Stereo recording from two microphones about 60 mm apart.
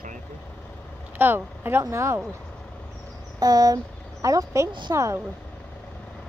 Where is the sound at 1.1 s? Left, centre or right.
Right.